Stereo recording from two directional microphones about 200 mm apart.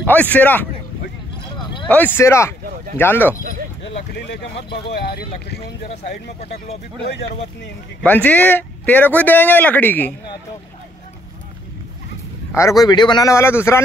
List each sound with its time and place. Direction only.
0.0 s speech: 10° left (ahead or behind)
1.9 s speech: 10° left (ahead or behind)
4.3 s speech: 55° left (ahead or behind)
8.0 s speech: 10° left (ahead or behind)
12.5 s speech: 15° left (ahead or behind)